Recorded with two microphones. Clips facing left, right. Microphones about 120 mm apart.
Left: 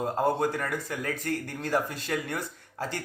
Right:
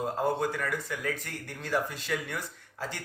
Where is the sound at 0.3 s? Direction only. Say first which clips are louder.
Left 2 dB; 40° left (ahead or behind).